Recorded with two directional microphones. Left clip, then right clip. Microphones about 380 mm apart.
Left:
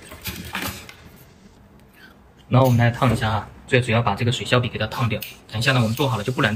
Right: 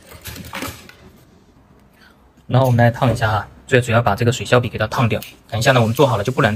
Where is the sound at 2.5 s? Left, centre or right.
Centre.